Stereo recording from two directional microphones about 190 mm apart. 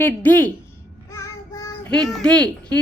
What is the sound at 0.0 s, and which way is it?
Speech, 10° left (ahead or behind).